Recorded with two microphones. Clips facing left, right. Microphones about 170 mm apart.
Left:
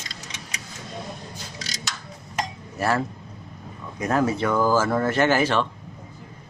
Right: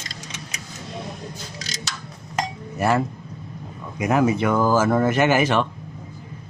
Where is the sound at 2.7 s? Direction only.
15° right (ahead or behind).